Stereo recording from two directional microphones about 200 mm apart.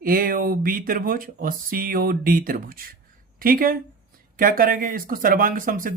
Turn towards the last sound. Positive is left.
turn(degrees=-45)  # may be behind; listen again after turning